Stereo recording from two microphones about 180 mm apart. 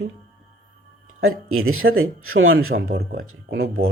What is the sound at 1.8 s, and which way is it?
Speech, 70° right (ahead or behind).